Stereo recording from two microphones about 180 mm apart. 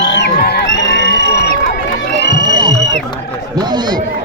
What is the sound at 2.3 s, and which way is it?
Crowd, 25° right (ahead or behind).